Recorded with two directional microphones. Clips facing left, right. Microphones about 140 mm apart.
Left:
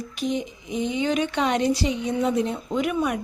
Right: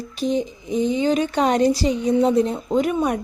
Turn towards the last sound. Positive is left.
turn(degrees=-35)  # may be behind; listen again after turning